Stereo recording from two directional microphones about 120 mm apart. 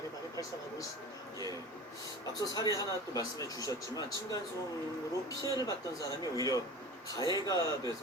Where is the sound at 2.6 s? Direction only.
30° left (ahead or behind).